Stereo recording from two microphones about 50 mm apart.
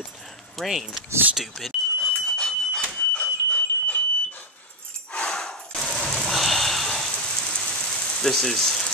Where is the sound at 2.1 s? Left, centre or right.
Centre.